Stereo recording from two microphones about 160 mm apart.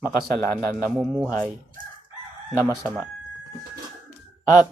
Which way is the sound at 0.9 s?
Centre (ahead or behind).